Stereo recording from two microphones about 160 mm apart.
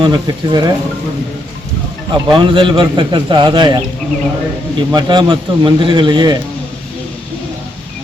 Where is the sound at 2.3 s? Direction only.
30° right (ahead or behind).